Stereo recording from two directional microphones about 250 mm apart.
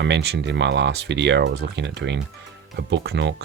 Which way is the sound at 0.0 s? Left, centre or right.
Right.